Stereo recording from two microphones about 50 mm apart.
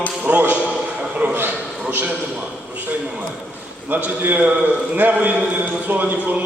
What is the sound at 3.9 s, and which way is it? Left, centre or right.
A man's voice, right.